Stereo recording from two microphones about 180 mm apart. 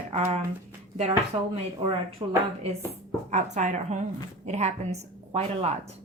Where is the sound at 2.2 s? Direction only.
25° right (ahead or behind).